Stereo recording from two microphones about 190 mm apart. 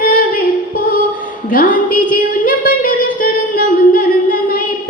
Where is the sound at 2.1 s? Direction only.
45° left (ahead or behind).